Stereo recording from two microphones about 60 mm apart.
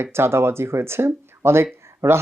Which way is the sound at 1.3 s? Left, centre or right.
Right.